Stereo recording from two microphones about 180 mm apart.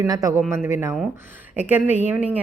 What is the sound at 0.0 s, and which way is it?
Speech, 20° right (ahead or behind).